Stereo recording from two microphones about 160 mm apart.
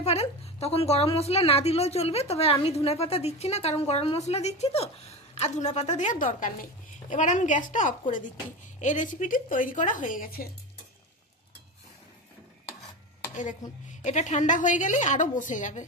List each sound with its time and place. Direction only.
0.0 s a woman's voice: 40° left (ahead or behind); by 10.5 s 65° left (ahead or behind)
13.3 s a woman's voice: 50° left (ahead or behind)